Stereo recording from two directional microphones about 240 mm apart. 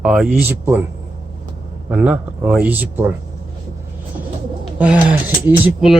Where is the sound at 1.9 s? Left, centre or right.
Centre.